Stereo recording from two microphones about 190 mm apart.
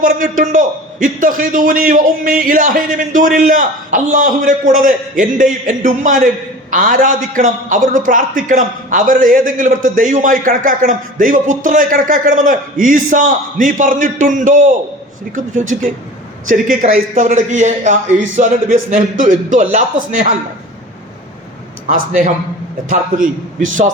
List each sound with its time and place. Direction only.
0.0 s a man's voice: 45° right (ahead or behind)
21.8 s a man's voice: 40° right (ahead or behind)